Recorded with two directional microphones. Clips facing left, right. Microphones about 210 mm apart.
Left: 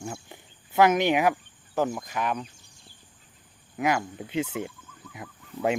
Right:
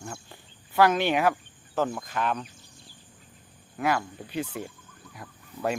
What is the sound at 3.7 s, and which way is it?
Speech, 15° left (ahead or behind).